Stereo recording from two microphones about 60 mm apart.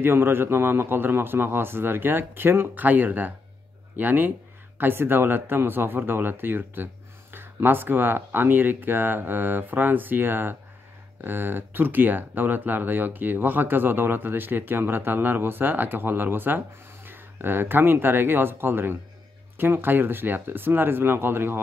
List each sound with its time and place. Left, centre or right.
0.0 s speech: right